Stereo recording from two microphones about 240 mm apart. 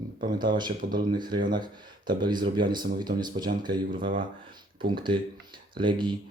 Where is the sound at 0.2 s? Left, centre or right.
Centre.